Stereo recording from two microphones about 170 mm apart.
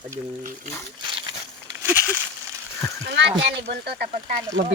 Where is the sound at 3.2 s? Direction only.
80° right; by 4.4 s 60° right (ahead or behind).